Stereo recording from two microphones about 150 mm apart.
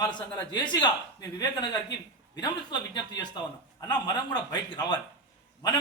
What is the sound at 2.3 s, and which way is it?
A man's voice, 30° left (ahead or behind).